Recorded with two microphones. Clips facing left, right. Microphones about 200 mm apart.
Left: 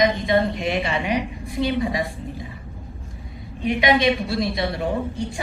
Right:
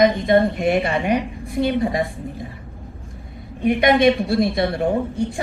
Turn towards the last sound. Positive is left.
turn(degrees=-55)  # may be behind; listen again after turning